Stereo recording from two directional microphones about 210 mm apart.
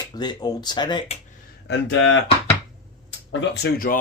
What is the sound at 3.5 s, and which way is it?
Speech, 45° left (ahead or behind).